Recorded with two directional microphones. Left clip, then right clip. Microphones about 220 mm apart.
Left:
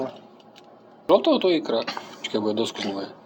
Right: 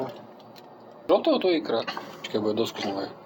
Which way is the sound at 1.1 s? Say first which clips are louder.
Left 3 dB; 15° left (ahead or behind).